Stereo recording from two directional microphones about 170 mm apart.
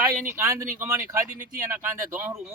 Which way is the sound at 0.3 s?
15° right (ahead or behind).